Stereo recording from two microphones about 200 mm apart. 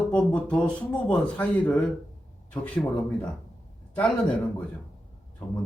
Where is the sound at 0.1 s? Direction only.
5° left (ahead or behind).